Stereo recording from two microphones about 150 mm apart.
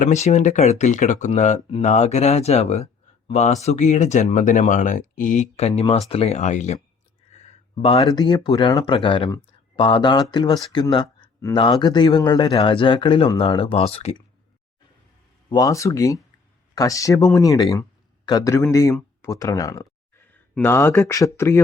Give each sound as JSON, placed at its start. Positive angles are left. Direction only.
{"t": 0.0, "sound": "speech", "side_deg": 50}
{"t": 7.3, "sound": "a sound", "side_deg": 45}
{"t": 8.1, "sound": "speech", "side_deg": 30}
{"t": 15.4, "sound": "speech", "side_deg": 25}